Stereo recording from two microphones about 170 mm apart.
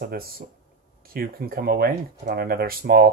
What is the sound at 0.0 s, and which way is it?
Speech, 65° right (ahead or behind).